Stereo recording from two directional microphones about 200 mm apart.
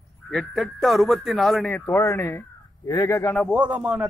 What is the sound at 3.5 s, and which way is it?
Speech, 5° right (ahead or behind).